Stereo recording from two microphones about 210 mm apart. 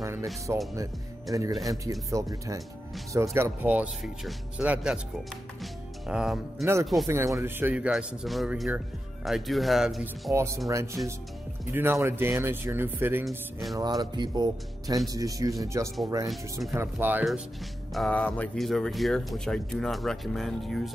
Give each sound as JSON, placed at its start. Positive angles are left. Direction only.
{"t": 0.0, "sound": "music", "side_deg": -15}
{"t": 0.5, "sound": "speech", "side_deg": -15}
{"t": 1.7, "sound": "speech", "side_deg": -15}
{"t": 6.6, "sound": "speech", "side_deg": -15}
{"t": 10.3, "sound": "speech", "side_deg": -15}
{"t": 17.9, "sound": "speech", "side_deg": 5}